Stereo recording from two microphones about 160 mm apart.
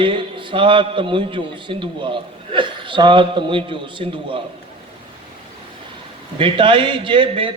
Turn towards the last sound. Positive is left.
turn(degrees=-35)  # may be behind; listen again after turning